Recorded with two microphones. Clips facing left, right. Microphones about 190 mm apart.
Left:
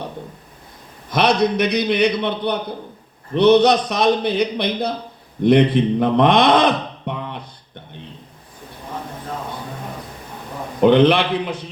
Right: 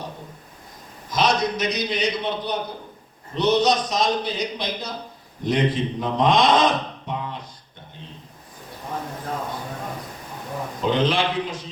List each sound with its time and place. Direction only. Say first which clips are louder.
1.1 s a man's voice: left 5 dB; 60° left (ahead or behind)
10.8 s a man's voice: left 9 dB; 60° left (ahead or behind)